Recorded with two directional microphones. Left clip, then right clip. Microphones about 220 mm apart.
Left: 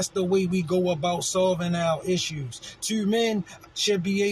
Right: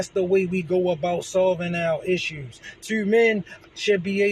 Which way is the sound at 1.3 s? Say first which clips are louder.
Right 4 dB; 15° left (ahead or behind).